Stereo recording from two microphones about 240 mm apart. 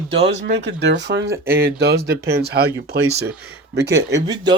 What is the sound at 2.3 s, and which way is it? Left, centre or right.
Speech, right.